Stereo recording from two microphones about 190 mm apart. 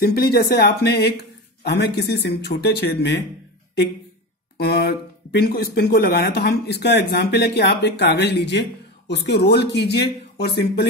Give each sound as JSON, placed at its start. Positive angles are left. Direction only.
{"t": 0.0, "sound": "speech", "side_deg": 55}
{"t": 4.6, "sound": "speech", "side_deg": 60}